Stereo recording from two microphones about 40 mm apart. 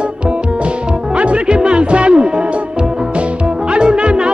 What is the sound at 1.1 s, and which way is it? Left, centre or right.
Music, right.